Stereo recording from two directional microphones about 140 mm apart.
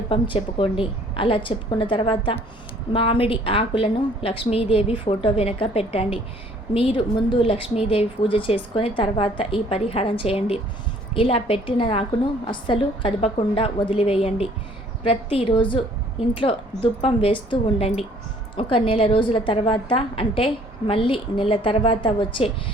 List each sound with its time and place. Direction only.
0.1 s a woman's voice: 40° left (ahead or behind)